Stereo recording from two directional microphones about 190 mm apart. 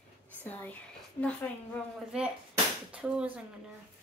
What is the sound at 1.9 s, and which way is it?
Speech, 5° right (ahead or behind).